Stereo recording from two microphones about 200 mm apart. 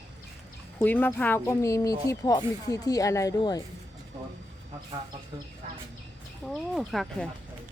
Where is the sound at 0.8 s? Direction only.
10° left (ahead or behind).